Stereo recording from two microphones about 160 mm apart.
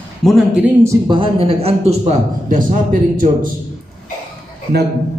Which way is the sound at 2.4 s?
55° right (ahead or behind).